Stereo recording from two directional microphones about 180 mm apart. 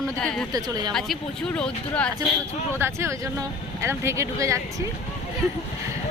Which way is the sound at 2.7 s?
15° right (ahead or behind).